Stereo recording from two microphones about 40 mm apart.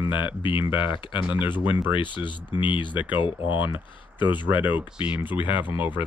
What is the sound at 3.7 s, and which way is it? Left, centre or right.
Speech, right.